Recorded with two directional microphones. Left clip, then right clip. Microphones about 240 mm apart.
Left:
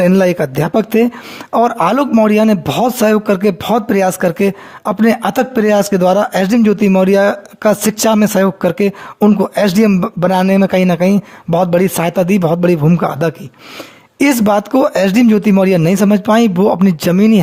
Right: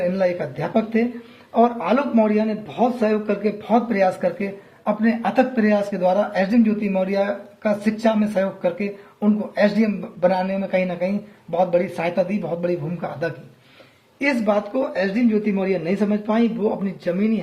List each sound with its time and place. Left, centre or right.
0.0 s a man's voice: left